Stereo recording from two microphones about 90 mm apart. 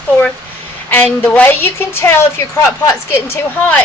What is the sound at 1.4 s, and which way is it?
A woman's voice, 25° left (ahead or behind).